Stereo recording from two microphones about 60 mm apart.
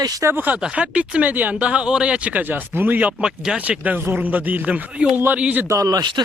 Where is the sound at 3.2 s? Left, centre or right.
Centre.